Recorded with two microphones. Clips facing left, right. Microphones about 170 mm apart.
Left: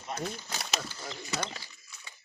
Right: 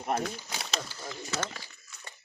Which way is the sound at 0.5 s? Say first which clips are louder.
Even; centre (ahead or behind).